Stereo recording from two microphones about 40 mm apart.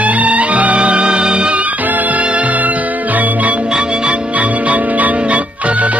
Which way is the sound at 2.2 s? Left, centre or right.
Right.